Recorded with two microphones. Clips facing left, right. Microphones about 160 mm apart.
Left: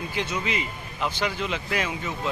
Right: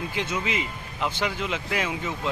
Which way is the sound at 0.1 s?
15° right (ahead or behind).